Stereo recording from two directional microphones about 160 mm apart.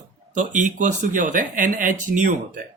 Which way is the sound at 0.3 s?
50° right (ahead or behind).